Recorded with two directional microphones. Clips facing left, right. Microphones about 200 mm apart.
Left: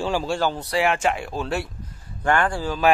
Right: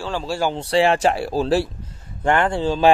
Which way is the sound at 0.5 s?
30° right (ahead or behind).